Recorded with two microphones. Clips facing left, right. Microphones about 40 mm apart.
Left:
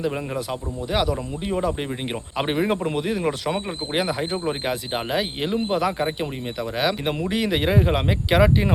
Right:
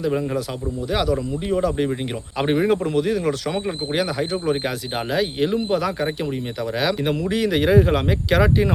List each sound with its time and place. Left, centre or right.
0.0 s a man's voice: centre